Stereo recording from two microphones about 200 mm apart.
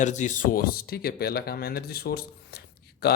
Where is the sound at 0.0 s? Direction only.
35° left (ahead or behind).